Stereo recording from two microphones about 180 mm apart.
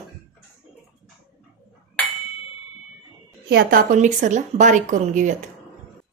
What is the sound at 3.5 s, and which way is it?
Speech, 55° right (ahead or behind).